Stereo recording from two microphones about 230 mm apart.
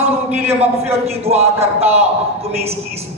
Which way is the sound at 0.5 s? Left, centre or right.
Right.